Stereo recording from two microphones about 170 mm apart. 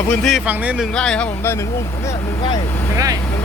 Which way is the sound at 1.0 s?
5° left (ahead or behind).